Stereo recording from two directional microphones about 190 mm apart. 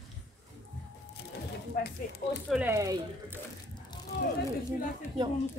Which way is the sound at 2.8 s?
20° right (ahead or behind).